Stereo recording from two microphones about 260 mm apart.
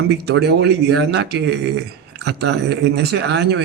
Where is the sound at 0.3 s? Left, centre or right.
Right.